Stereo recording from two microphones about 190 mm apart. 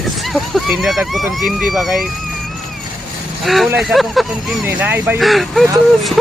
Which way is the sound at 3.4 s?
Centre (ahead or behind).